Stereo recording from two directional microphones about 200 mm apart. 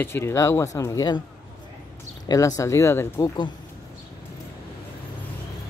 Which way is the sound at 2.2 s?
15° left (ahead or behind).